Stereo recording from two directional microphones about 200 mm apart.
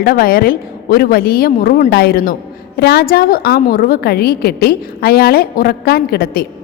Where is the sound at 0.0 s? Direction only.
45° left (ahead or behind).